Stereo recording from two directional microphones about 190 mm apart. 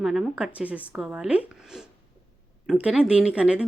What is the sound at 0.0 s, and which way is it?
Speech, centre (ahead or behind).